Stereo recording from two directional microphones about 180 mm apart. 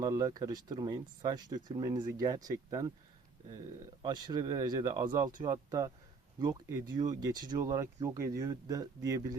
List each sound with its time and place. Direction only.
0.0 s speech: 20° right (ahead or behind)
4.0 s speech: 25° right (ahead or behind)